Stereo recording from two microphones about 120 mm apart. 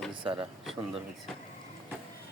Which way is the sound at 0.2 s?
45° right (ahead or behind).